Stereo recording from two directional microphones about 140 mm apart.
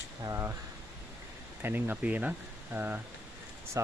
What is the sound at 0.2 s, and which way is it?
Speech, 20° right (ahead or behind).